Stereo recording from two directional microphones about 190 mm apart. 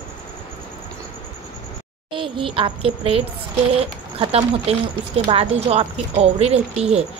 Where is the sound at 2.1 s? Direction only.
25° right (ahead or behind).